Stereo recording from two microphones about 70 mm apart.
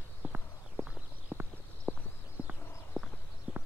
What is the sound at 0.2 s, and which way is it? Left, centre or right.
Clip-clop, right.